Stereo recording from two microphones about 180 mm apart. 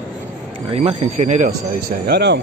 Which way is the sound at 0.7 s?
40° right (ahead or behind).